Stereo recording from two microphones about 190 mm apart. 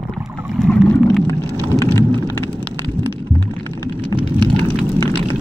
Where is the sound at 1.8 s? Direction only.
15° left (ahead or behind).